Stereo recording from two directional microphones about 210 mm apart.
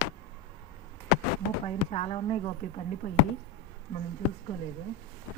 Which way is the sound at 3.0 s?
40° left (ahead or behind).